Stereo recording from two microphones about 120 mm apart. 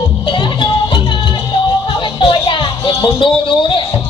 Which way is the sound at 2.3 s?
45° left (ahead or behind).